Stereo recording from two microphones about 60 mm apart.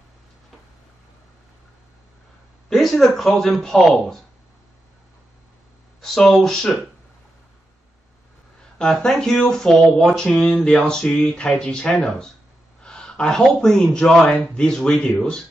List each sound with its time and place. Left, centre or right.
2.7 s a man's voice: centre
5.9 s a sound: centre
6.4 s speech: centre
8.7 s speech: centre